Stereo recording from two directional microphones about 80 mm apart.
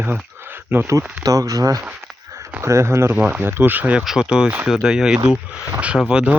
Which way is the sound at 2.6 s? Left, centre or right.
Right.